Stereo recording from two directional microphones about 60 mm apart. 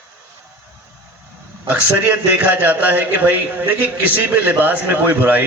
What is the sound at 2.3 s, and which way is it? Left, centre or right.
A man's voice, right.